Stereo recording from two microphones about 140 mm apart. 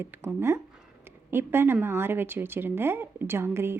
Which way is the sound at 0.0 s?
15° right (ahead or behind).